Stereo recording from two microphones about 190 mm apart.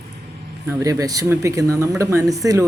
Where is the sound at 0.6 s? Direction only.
15° right (ahead or behind).